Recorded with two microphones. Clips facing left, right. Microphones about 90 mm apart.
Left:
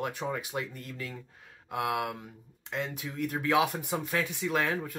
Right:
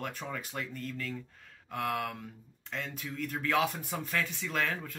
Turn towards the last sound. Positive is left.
turn(degrees=15)  # may be behind; listen again after turning